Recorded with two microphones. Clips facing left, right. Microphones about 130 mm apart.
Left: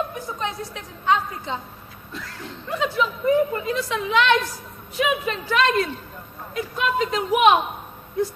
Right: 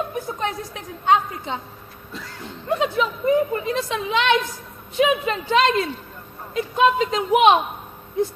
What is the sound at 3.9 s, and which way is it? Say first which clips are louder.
A woman's voice: left 1 dB; 20° right (ahead or behind).